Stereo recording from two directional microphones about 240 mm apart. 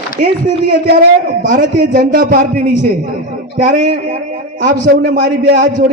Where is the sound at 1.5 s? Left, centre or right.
Right.